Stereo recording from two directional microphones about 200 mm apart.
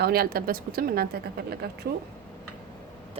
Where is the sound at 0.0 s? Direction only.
50° right (ahead or behind).